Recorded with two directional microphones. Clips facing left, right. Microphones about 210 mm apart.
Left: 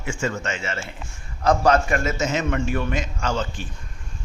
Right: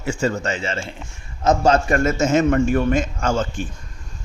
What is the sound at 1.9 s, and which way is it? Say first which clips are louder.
Speech: right 6 dB; 50° right (ahead or behind).